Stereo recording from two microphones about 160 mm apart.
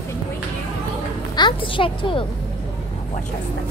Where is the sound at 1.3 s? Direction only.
30° left (ahead or behind).